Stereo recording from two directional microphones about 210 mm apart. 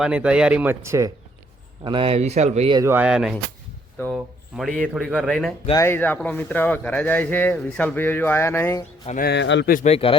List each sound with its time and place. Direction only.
0.0 s speech: 5° right (ahead or behind)
1.8 s speech: 25° right (ahead or behind)
2.7 s a man's voice: 10° right (ahead or behind)
5.6 s a man's voice: 15° left (ahead or behind)
9.0 s speech: 40° left (ahead or behind)
9.3 s speech: 55° left (ahead or behind)
9.7 s speech: 30° left (ahead or behind)